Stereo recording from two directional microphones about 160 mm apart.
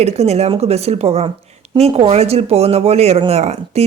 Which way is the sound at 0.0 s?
40° right (ahead or behind).